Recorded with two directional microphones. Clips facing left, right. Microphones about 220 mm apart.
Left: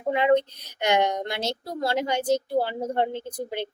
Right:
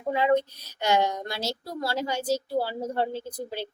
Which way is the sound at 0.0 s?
20° left (ahead or behind).